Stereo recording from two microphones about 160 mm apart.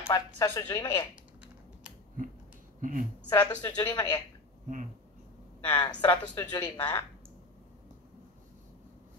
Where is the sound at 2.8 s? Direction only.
55° right (ahead or behind).